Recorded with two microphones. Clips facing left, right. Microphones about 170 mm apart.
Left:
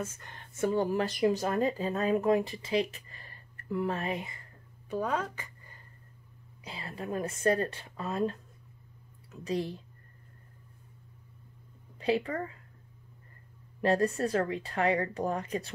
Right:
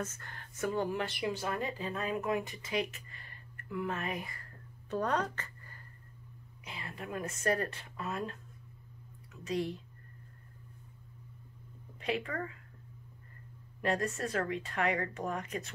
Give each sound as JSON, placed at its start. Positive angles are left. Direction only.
{"t": 0.0, "sound": "speech", "side_deg": 15}
{"t": 0.7, "sound": "speech", "side_deg": 35}
{"t": 4.8, "sound": "speech", "side_deg": 5}
{"t": 6.6, "sound": "speech", "side_deg": 30}
{"t": 12.0, "sound": "speech", "side_deg": 30}
{"t": 13.7, "sound": "speech", "side_deg": 35}